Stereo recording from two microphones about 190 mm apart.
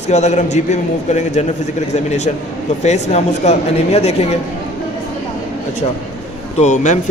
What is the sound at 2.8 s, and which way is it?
Speech, 35° left (ahead or behind).